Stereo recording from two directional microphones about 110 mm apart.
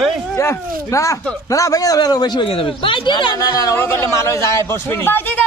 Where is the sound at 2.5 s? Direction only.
55° left (ahead or behind); by 3.8 s 35° left (ahead or behind).